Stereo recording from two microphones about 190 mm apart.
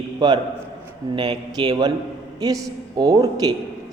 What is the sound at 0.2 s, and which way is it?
Speech, 20° right (ahead or behind).